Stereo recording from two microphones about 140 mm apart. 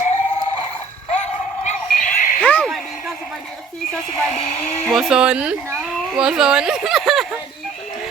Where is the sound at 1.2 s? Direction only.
50° left (ahead or behind).